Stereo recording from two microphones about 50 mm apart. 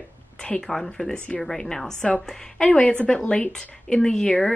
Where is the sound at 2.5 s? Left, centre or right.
Left.